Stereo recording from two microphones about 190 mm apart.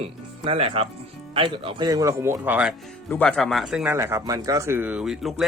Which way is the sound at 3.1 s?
5° left (ahead or behind).